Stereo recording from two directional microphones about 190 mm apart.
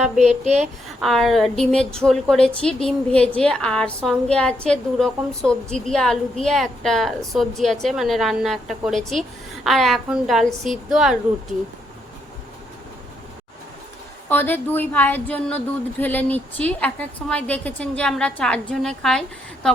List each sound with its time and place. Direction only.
0.2 s speech: 35° right (ahead or behind)
1.0 s a woman's voice: centre (ahead or behind)
14.3 s speech: 10° left (ahead or behind)